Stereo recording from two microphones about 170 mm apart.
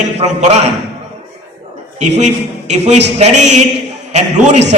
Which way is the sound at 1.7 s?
45° right (ahead or behind).